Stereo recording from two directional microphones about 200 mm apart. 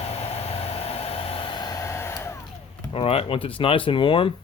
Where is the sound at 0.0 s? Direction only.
30° left (ahead or behind); by 2.4 s 15° left (ahead or behind).